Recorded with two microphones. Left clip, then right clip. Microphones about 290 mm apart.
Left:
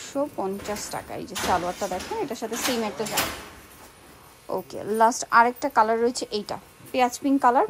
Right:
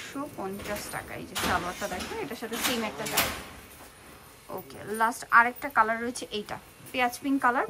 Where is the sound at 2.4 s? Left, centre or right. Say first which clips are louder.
Left 4 dB; centre.